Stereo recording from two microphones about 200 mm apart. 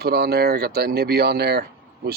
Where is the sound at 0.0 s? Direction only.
55° right (ahead or behind).